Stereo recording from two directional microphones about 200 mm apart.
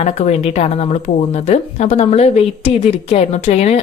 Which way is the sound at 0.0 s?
35° left (ahead or behind).